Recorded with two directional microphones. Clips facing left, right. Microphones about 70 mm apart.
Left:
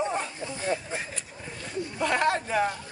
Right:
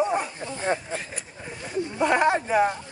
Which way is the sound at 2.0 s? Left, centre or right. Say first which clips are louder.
Right 4 dB; right.